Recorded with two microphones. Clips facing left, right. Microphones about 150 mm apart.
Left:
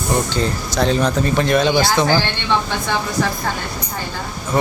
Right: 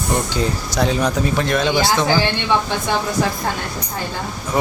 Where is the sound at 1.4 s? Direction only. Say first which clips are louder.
Left 4 dB; centre (ahead or behind).